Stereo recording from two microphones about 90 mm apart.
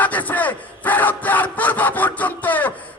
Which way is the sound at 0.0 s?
20° left (ahead or behind).